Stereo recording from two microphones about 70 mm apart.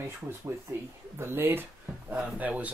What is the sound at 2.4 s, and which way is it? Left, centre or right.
Speech, right.